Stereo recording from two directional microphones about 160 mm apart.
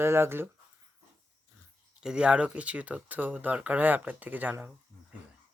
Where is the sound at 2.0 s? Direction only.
5° right (ahead or behind).